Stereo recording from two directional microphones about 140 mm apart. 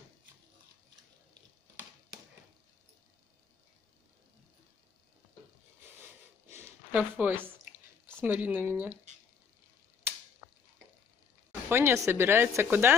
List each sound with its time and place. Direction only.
6.5 s a sound: 15° right (ahead or behind)
8.2 s speech: 15° right (ahead or behind)
11.7 s speech: 20° right (ahead or behind)